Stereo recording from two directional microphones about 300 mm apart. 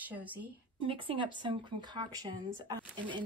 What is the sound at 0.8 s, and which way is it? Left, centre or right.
Speech, centre.